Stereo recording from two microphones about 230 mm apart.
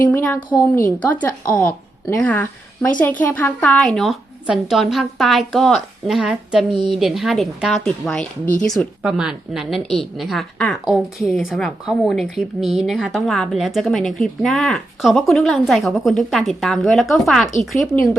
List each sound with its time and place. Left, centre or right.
0.0 s a woman's voice: centre